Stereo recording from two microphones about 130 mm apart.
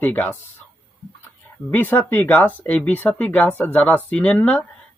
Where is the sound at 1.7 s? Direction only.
15° left (ahead or behind).